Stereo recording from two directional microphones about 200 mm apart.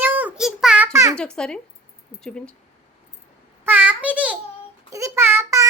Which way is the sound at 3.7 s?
10° right (ahead or behind).